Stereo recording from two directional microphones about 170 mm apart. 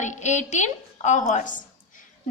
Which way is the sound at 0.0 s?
45° left (ahead or behind).